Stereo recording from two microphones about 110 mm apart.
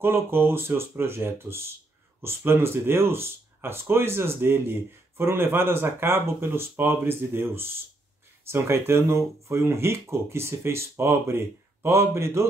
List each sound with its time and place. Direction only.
0.0 s speech: 20° right (ahead or behind)